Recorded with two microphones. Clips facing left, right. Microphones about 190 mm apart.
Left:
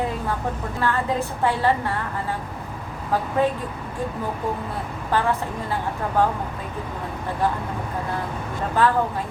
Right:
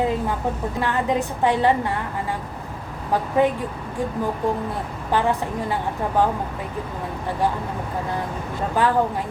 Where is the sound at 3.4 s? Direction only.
15° right (ahead or behind).